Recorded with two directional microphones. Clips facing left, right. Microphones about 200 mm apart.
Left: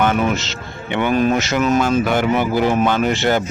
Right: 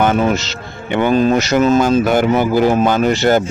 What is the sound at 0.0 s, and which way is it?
Speech, 35° right (ahead or behind).